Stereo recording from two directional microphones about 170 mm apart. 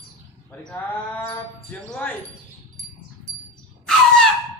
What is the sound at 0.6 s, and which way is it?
A woman's voice, 5° left (ahead or behind).